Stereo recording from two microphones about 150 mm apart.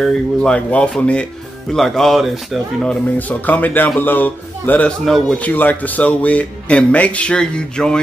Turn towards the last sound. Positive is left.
turn(degrees=5)  # may be behind; listen again after turning